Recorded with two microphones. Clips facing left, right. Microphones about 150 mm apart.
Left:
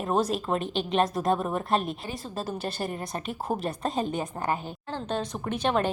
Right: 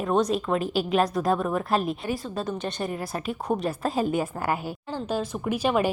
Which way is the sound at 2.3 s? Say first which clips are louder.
Right 3 dB; 30° left (ahead or behind).